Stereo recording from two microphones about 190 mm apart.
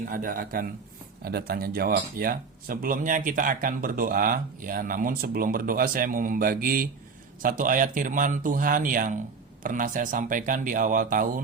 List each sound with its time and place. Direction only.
0.1 s speech: 45° right (ahead or behind)